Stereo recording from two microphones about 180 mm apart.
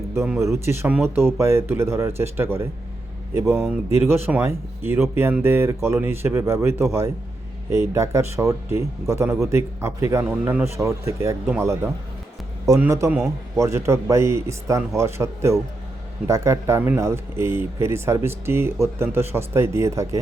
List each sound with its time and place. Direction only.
0.6 s speech: 15° right (ahead or behind)
3.8 s speech: 15° right (ahead or behind)